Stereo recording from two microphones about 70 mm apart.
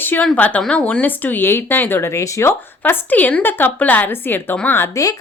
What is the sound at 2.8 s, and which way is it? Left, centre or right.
A woman's voice, left.